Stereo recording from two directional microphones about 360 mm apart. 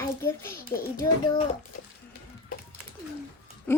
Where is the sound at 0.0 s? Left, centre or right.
Centre.